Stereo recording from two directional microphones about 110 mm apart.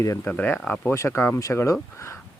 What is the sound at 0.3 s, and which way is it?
Speech, 20° left (ahead or behind).